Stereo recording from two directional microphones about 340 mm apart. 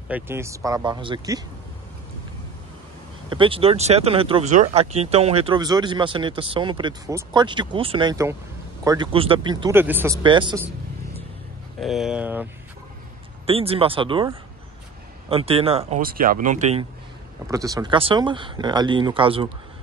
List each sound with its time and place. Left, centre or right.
0.1 s speech: centre
3.3 s speech: centre
11.8 s speech: centre
13.5 s speech: centre
17.5 s speech: centre